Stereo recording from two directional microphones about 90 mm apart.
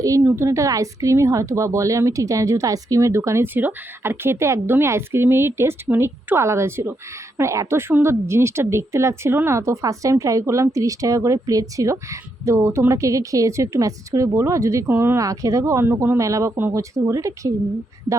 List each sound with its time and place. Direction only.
0.0 s a woman's voice: 35° right (ahead or behind)